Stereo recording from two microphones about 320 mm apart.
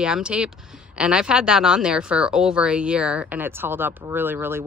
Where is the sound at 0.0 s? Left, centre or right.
Centre.